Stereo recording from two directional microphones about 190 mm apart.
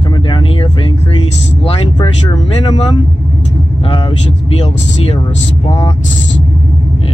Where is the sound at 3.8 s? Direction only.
25° left (ahead or behind).